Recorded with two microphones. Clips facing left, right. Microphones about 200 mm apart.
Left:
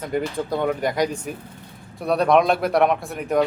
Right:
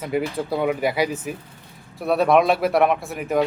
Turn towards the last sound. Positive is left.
turn(degrees=0)  # may be behind; listen again after turning